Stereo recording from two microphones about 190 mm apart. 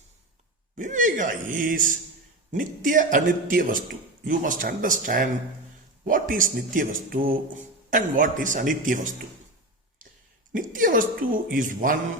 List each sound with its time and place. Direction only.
0.8 s speech: 45° right (ahead or behind)
10.5 s speech: 45° right (ahead or behind)